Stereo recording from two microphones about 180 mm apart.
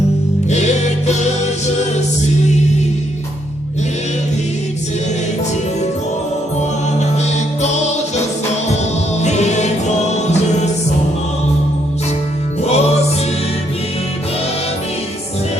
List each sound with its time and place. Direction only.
0.5 s music: 40° left (ahead or behind)
7.0 s music: 40° left (ahead or behind)
9.2 s music: 40° left (ahead or behind)
12.6 s music: 35° left (ahead or behind)